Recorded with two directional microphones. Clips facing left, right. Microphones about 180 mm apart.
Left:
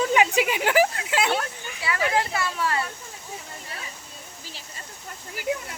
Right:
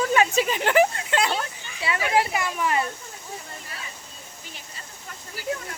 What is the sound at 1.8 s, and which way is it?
Speech, 20° right (ahead or behind).